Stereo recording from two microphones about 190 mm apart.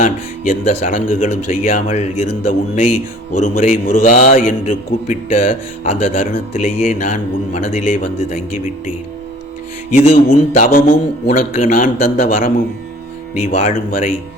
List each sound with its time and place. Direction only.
0.0 s speech: 40° left (ahead or behind)
9.9 s speech: 35° left (ahead or behind)
13.6 s speech: 40° left (ahead or behind)